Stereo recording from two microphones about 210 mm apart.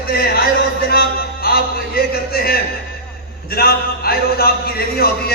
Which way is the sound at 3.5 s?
45° left (ahead or behind).